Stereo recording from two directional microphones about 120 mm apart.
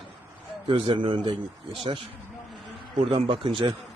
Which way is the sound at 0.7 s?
45° right (ahead or behind).